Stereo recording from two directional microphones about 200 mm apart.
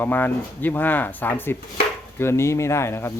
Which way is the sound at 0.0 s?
10° left (ahead or behind).